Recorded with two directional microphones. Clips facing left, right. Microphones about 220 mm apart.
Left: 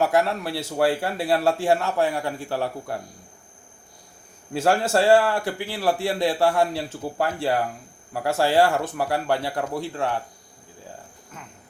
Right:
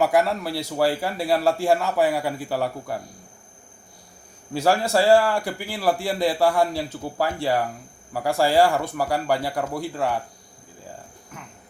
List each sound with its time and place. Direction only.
0.0 s a man's voice: centre (ahead or behind)
4.5 s a man's voice: centre (ahead or behind)